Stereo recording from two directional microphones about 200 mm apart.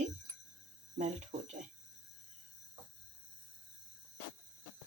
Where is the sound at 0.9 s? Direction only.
35° right (ahead or behind).